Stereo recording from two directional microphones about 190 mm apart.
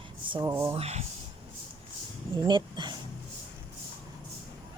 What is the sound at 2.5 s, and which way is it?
Speech, 25° right (ahead or behind).